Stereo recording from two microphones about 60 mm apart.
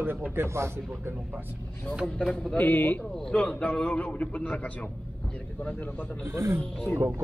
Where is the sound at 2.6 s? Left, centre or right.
Left.